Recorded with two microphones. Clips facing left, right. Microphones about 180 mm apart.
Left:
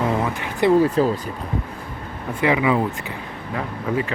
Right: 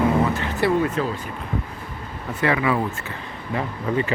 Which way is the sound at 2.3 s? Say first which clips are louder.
Left 2 dB; 15° left (ahead or behind).